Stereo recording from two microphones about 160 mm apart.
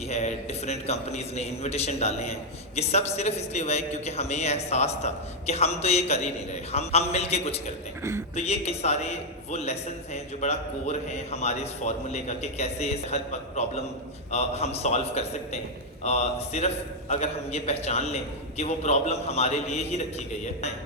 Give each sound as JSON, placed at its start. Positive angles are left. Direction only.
{"t": 0.1, "sound": "a man's voice", "side_deg": 45}